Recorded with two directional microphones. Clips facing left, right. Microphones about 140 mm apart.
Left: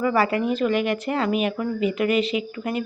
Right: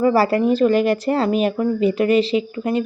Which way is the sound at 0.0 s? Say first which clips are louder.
Right 5 dB; 35° right (ahead or behind).